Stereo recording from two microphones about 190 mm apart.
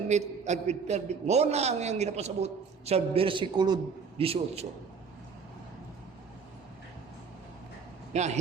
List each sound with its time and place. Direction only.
0.1 s a man's voice: 35° right (ahead or behind)
8.1 s a man's voice: 35° right (ahead or behind)